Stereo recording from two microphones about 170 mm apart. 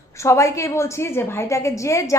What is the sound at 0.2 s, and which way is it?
A woman's voice, 15° left (ahead or behind).